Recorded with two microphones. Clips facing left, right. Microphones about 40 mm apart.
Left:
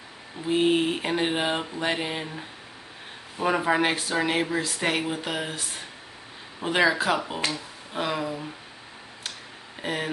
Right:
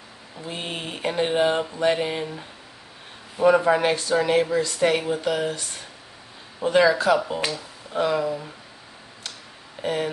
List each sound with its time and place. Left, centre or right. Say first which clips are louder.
0.5 s mantra: left 10 dB; centre
4.1 s speech: right 5 dB; centre
6.6 s speech: right 4 dB; left
7.2 s mantra: right 3 dB; centre
9.8 s speech: right 4 dB; left